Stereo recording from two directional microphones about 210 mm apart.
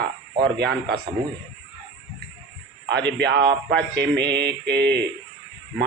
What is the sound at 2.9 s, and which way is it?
A man's voice, 55° right (ahead or behind).